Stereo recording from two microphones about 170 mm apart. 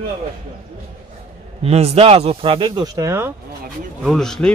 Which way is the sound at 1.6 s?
35° right (ahead or behind).